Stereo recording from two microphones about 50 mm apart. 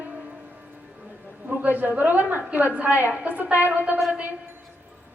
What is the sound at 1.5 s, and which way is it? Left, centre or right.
Female singing, right.